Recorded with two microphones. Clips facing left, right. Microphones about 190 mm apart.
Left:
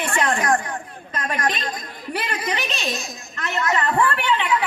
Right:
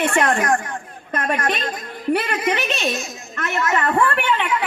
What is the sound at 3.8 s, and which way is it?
Speech, 60° right (ahead or behind).